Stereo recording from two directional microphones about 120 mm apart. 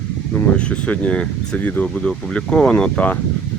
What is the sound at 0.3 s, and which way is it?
Speech, 10° left (ahead or behind).